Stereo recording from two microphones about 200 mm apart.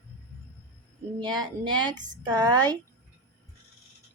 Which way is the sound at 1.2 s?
20° right (ahead or behind).